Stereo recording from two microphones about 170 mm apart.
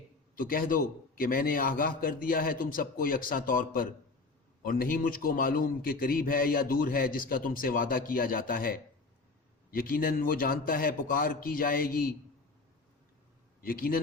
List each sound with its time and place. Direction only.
0.3 s a man's voice: 55° left (ahead or behind)
13.6 s a man's voice: 60° left (ahead or behind)